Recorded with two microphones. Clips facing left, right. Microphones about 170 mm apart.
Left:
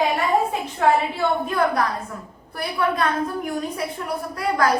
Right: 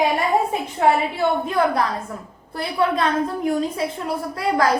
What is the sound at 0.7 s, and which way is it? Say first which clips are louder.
A woman's voice: right 1 dB; 25° right (ahead or behind).